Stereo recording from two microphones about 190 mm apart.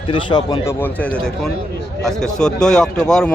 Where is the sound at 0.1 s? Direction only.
25° left (ahead or behind).